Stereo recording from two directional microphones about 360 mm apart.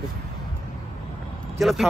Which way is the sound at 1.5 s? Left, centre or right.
Centre.